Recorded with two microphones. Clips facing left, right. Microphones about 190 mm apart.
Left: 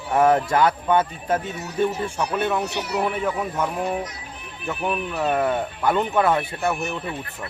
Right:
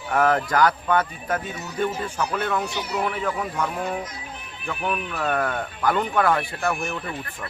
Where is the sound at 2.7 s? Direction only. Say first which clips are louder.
Left 2 dB; 70° left (ahead or behind).